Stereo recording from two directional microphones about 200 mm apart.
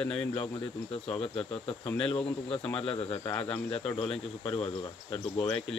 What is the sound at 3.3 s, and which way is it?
Speech, 5° left (ahead or behind).